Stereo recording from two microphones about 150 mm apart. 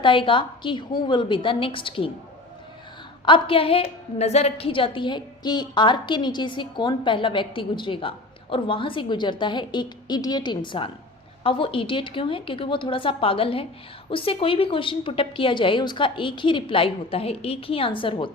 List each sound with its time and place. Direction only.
0.0 s a woman's voice: 35° left (ahead or behind)
3.2 s a woman's voice: 35° left (ahead or behind)